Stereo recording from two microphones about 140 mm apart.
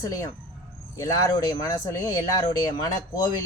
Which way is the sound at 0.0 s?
25° left (ahead or behind).